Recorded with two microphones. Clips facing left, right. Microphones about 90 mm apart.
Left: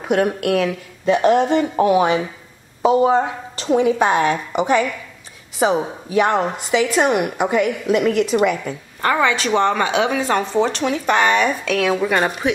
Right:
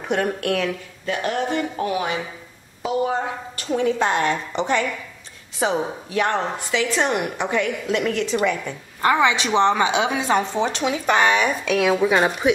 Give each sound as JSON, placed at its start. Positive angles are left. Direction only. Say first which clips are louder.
{"t": 0.1, "sound": "a woman's voice", "louder": "left 5 dB", "side_deg": 5}
{"t": 1.0, "sound": "speech", "louder": "left 9 dB", "side_deg": 25}
{"t": 3.7, "sound": "a woman's voice", "louder": "left 5 dB", "side_deg": 10}
{"t": 9.0, "sound": "speech", "louder": "even", "side_deg": -15}